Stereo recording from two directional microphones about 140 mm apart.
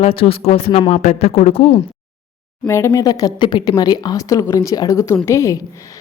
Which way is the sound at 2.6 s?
20° left (ahead or behind).